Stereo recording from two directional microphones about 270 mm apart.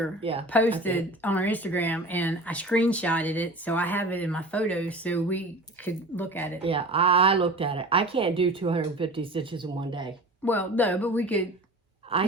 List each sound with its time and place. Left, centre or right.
0.2 s speech: right
0.5 s speech: centre
6.6 s speech: centre
10.4 s speech: centre
12.1 s speech: right